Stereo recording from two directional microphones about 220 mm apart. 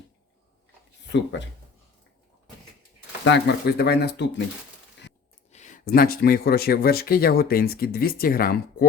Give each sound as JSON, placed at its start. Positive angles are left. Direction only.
{"t": 1.1, "sound": "speech", "side_deg": 55}
{"t": 3.2, "sound": "speech", "side_deg": 50}
{"t": 5.5, "sound": "speech", "side_deg": 30}